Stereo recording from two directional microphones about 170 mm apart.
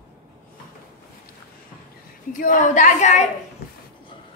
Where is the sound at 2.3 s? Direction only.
50° left (ahead or behind).